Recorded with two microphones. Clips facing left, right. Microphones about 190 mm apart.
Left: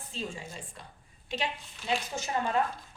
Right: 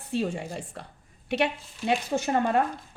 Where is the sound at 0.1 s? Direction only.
65° right (ahead or behind).